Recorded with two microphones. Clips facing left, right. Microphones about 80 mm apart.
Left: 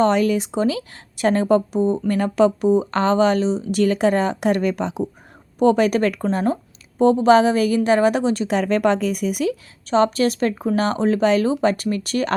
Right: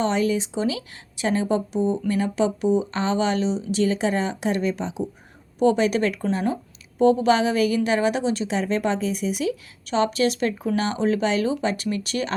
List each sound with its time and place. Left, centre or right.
0.0 s speech: left
3.8 s speech: left
5.5 s speech: left
7.0 s speech: left
9.4 s speech: left